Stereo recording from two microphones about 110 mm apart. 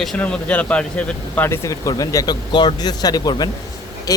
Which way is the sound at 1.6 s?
30° left (ahead or behind).